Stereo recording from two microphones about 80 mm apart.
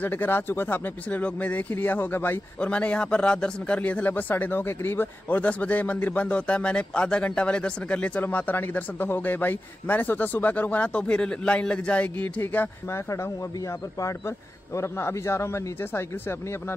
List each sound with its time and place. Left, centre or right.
0.0 s speech: left
2.6 s speech: centre
5.4 s speech: centre
12.4 s speech: left
13.1 s a man's voice: left